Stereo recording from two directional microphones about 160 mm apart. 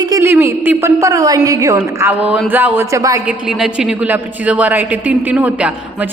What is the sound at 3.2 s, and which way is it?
A woman's voice, 5° right (ahead or behind).